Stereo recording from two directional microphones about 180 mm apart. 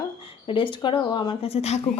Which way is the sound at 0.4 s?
30° left (ahead or behind).